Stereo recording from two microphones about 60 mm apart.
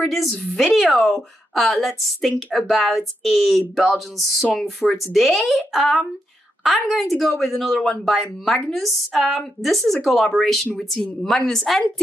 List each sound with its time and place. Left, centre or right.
0.1 s a woman's voice: centre